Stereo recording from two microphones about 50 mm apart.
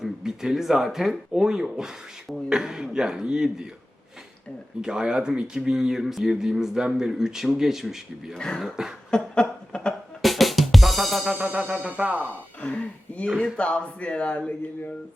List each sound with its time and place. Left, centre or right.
0.0 s speech: centre
4.8 s speech: centre
5.7 s speech: centre
8.3 s speech: centre
9.0 s a sound: centre
10.2 s drum kit: centre
11.3 s music: right
12.6 s a sound: left
13.4 s speech: left